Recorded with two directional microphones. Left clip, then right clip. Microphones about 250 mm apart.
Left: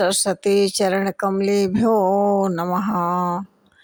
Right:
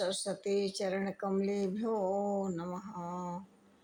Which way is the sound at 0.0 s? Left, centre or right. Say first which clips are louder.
Left 16 dB; left.